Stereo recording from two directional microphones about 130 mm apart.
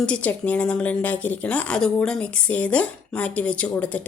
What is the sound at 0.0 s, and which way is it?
A woman's voice, 10° left (ahead or behind).